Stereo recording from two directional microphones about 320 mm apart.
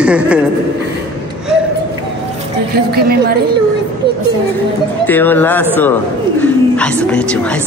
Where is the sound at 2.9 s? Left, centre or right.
Right.